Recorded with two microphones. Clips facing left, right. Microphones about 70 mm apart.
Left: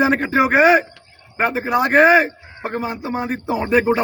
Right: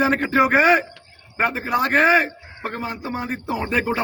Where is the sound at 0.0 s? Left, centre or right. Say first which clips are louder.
Left 2 dB; centre.